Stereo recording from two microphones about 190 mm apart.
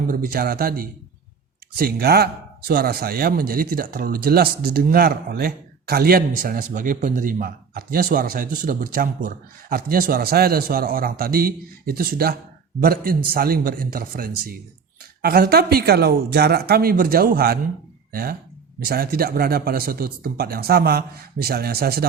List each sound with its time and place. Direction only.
0.1 s speech: 50° right (ahead or behind)